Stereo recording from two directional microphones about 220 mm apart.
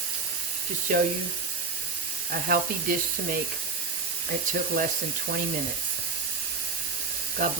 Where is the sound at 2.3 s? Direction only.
40° right (ahead or behind).